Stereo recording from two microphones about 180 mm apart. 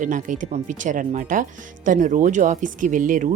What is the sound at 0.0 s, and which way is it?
Speech, 45° right (ahead or behind).